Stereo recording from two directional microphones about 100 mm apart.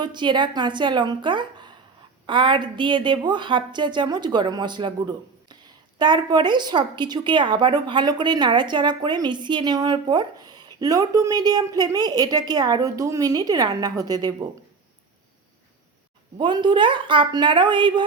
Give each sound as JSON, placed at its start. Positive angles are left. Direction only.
{"t": 0.0, "sound": "a woman's voice", "side_deg": -50}
{"t": 16.4, "sound": "a woman's voice", "side_deg": -50}